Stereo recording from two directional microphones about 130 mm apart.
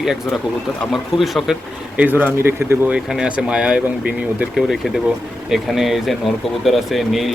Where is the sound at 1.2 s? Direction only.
Centre (ahead or behind).